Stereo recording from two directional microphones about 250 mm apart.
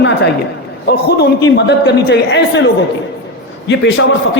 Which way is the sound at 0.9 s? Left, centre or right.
Left.